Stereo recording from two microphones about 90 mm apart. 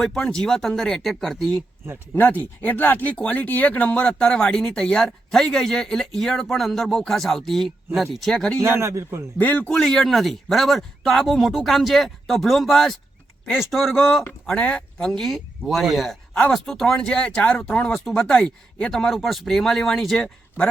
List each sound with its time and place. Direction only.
0.0 s speech: 5° left (ahead or behind)
2.1 s speech: 20° left (ahead or behind)
8.6 s a man's voice: 30° right (ahead or behind)
9.4 s speech: 15° left (ahead or behind); by 20.3 s centre (ahead or behind)